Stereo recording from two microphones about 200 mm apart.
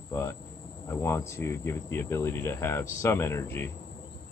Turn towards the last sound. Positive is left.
turn(degrees=10)  # may be behind; listen again after turning